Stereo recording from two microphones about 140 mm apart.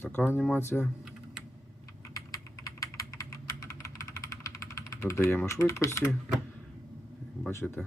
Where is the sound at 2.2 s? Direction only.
25° left (ahead or behind).